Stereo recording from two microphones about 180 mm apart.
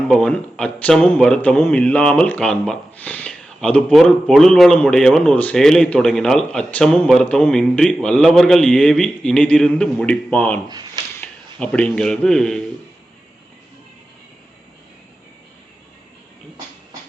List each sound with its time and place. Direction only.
0.1 s speech: 5° left (ahead or behind)
10.7 s a sound: 20° right (ahead or behind)
11.2 s speech: 5° left (ahead or behind)